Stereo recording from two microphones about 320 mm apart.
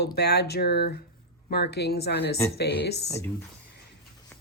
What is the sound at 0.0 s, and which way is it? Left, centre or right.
Speech, left.